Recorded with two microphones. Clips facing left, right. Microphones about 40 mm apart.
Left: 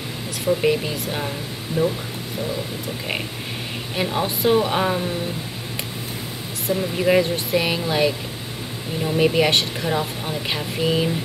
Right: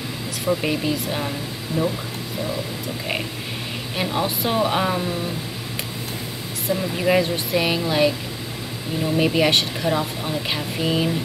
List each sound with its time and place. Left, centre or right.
0.6 s speech: centre
1.8 s speech: centre
3.9 s speech: centre
6.7 s speech: centre